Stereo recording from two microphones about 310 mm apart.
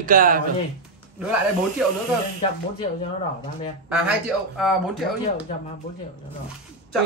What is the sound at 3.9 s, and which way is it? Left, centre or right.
Speech, centre.